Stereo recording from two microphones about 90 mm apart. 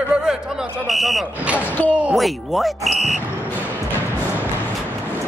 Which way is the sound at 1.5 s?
20° left (ahead or behind).